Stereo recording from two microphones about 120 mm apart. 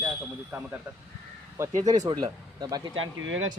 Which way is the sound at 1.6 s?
20° right (ahead or behind).